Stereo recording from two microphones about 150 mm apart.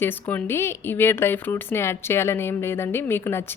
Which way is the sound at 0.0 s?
15° left (ahead or behind).